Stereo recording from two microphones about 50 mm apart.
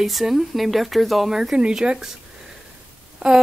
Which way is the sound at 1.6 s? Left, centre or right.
Centre.